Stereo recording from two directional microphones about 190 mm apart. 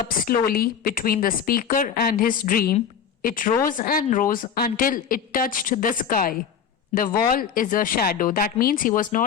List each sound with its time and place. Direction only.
0.3 s a woman's voice: 50° left (ahead or behind)